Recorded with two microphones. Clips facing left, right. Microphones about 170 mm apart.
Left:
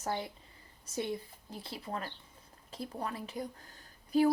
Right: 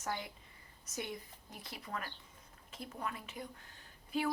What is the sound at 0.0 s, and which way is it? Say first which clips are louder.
A woman's voice: left 5 dB; 35° left (ahead or behind).